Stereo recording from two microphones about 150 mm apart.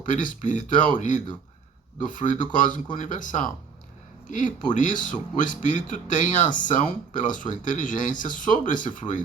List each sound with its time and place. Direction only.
0.0 s speech: 60° left (ahead or behind)